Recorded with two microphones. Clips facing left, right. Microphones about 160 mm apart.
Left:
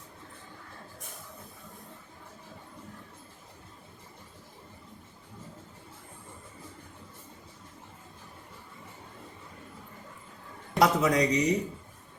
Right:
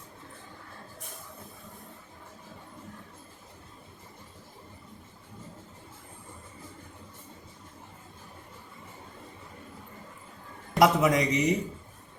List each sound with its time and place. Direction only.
10.8 s speech: 20° right (ahead or behind)